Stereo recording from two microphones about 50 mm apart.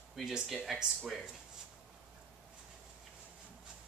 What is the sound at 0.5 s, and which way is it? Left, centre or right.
Speech, centre.